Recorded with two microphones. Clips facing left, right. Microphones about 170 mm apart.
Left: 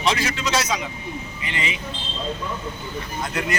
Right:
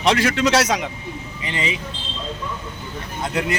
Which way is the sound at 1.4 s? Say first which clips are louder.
Right 4 dB; 30° right (ahead or behind).